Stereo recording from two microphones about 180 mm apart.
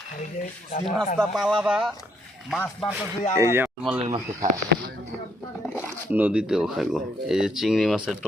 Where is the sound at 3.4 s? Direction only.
15° right (ahead or behind).